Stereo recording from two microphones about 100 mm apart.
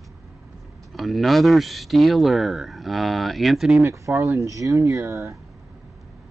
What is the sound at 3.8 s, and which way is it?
Speech, 30° right (ahead or behind).